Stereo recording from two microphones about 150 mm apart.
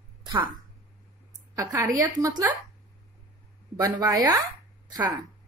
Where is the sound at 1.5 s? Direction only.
20° right (ahead or behind).